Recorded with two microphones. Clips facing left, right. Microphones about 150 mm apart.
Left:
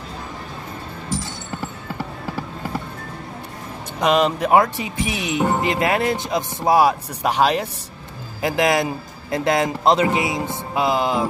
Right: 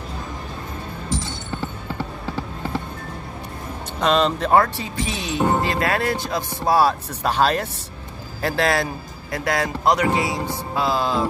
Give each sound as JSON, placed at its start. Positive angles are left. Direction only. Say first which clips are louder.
{"t": 2.0, "sound": "music", "louder": "even", "side_deg": 10}
{"t": 4.0, "sound": "a man's voice", "louder": "left 1 dB", "side_deg": 10}